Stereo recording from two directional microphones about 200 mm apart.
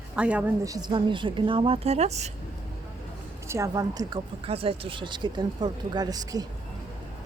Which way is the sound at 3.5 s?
15° right (ahead or behind).